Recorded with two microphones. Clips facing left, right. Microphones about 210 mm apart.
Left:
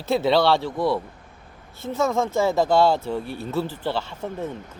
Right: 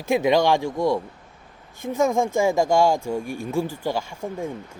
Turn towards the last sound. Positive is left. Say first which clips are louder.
# even
turn(degrees=-10)  # may be behind; listen again after turning